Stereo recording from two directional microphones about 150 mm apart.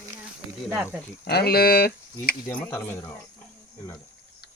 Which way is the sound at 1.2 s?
90° left.